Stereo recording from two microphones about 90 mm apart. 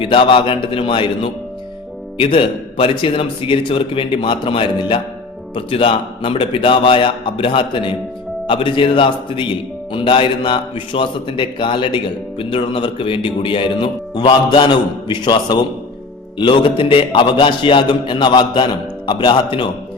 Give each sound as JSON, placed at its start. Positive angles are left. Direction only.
{"t": 0.0, "sound": "a man's voice", "side_deg": 75}
{"t": 5.5, "sound": "a man's voice", "side_deg": 85}
{"t": 16.4, "sound": "a man's voice", "side_deg": 65}